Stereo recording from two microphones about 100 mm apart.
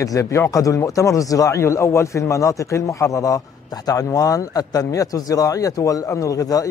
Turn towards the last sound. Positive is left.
turn(degrees=35)  # may be behind; listen again after turning